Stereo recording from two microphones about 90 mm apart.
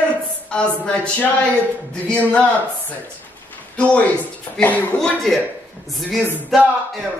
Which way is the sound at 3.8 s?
15° left (ahead or behind).